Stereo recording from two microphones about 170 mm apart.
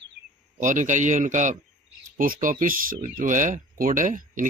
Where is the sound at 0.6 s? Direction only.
50° right (ahead or behind).